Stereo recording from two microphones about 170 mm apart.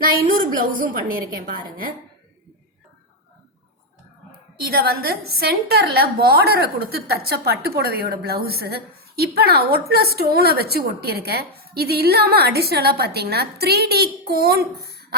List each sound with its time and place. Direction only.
0.8 s a woman's voice: 55° right (ahead or behind)
4.6 s a woman's voice: 65° right (ahead or behind)